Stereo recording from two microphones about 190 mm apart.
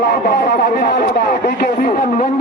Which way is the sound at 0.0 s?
55° left (ahead or behind).